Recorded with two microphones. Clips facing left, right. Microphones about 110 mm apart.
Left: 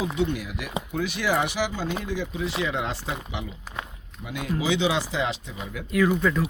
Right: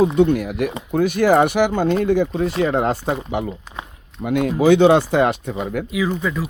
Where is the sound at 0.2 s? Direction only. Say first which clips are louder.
Right 11 dB; 55° right (ahead or behind).